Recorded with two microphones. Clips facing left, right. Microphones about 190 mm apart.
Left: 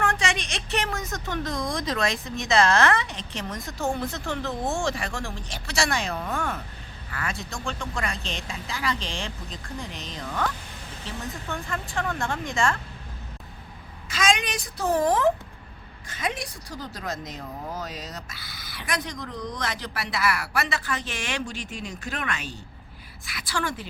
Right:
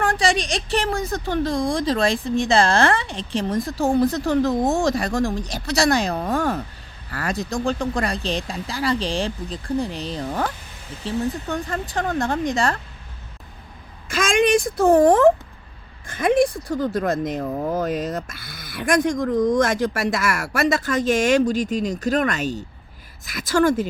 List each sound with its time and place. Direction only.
0.0 s a woman's voice: 35° right (ahead or behind)
14.1 s speech: 50° right (ahead or behind)